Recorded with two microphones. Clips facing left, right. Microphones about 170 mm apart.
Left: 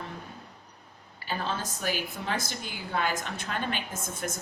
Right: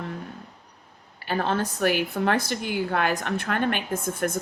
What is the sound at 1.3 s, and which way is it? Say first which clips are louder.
A woman's voice: right 7 dB; 60° right (ahead or behind).